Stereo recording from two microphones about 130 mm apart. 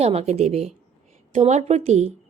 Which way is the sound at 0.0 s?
55° right (ahead or behind).